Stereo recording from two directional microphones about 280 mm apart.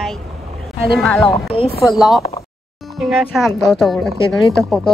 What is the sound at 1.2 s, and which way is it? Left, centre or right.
Speech, centre.